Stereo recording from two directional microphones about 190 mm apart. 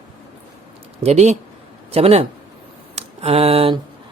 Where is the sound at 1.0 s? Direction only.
35° right (ahead or behind).